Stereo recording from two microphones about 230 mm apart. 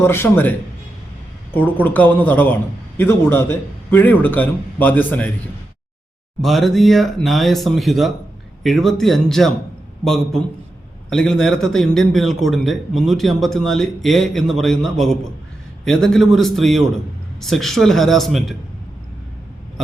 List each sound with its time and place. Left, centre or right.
0.0 s a man's voice: centre
1.5 s a man's voice: centre
6.4 s a man's voice: centre